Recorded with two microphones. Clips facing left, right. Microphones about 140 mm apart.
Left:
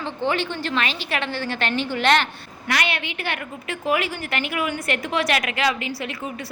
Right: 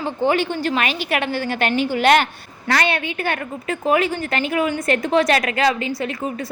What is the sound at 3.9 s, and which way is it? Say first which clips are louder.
A woman's voice: right 5 dB; 35° right (ahead or behind).